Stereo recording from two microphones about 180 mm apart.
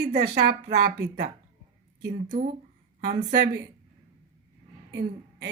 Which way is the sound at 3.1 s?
70° right (ahead or behind).